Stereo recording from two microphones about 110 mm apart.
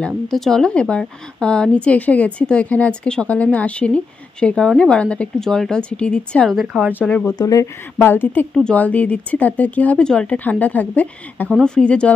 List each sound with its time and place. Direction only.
0.3 s speech: 5° left (ahead or behind)
6.5 s a woman's voice: 5° right (ahead or behind)
7.1 s speech: 10° left (ahead or behind)
7.3 s speech: 30° left (ahead or behind)
8.0 s speech: 20° left (ahead or behind)